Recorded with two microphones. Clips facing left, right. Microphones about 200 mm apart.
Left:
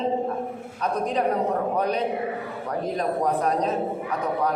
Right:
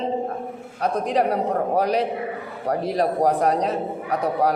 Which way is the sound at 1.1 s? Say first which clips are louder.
Right 2 dB; 35° right (ahead or behind).